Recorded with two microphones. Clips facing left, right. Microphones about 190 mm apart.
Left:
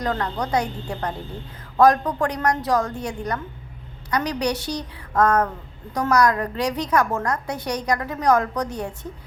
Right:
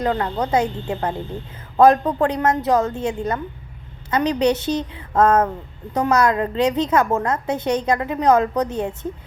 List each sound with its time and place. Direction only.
0.0 s a woman's voice: 25° right (ahead or behind)